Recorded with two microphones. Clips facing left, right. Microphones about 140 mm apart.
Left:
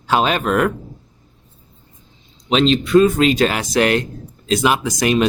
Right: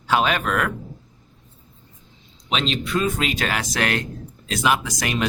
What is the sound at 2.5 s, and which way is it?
Speech, 30° left (ahead or behind).